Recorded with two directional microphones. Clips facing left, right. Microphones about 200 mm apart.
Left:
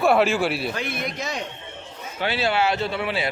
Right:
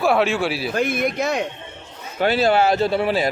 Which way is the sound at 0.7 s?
50° right (ahead or behind).